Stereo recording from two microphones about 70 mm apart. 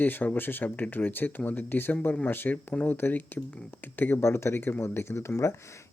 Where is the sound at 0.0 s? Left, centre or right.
Left.